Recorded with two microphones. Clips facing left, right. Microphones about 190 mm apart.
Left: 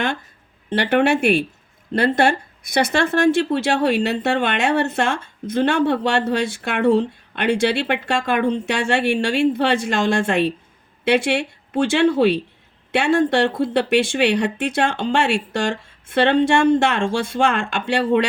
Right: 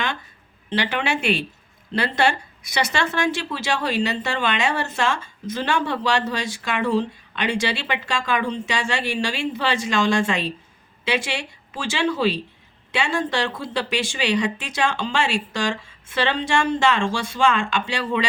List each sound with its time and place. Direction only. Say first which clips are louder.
0.7 s speech: left 7 dB; 55° left (ahead or behind)